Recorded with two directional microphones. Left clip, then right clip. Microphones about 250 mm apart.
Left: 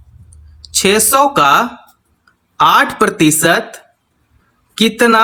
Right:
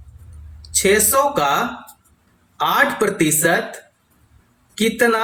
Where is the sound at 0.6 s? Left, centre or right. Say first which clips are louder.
Left 4 dB; left.